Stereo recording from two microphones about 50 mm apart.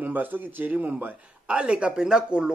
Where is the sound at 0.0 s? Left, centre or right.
Right.